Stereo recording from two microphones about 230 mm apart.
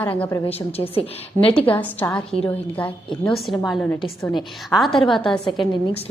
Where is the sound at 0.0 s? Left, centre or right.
Centre.